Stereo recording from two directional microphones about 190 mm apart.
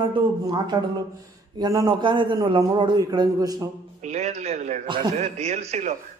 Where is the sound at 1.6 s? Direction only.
20° right (ahead or behind).